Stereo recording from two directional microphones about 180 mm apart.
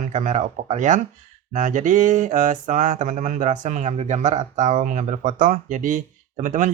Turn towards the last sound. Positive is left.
turn(degrees=-45)  # may be behind; listen again after turning